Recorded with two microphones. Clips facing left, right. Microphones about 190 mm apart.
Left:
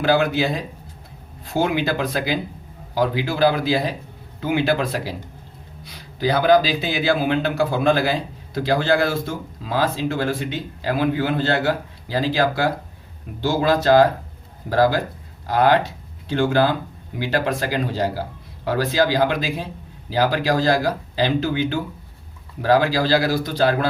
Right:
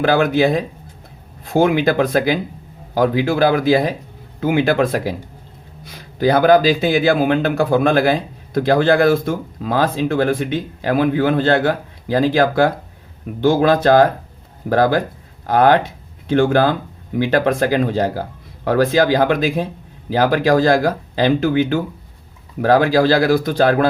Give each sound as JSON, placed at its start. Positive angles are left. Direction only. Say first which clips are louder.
{"t": 0.0, "sound": "speech", "louder": "right 4 dB", "side_deg": -55}